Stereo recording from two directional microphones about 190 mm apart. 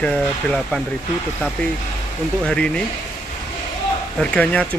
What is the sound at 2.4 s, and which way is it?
Speech, 5° left (ahead or behind).